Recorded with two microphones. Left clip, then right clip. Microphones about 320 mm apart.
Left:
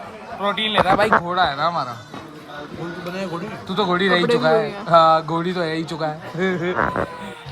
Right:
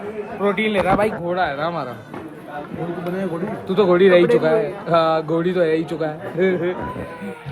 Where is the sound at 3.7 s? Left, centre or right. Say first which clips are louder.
Right 5 dB; centre.